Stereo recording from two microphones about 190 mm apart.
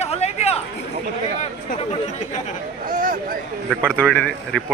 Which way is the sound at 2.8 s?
45° right (ahead or behind).